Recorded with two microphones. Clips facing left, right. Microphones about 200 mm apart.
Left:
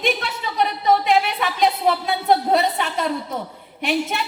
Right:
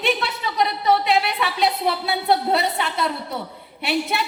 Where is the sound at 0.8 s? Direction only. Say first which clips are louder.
Left 2 dB; 40° left (ahead or behind).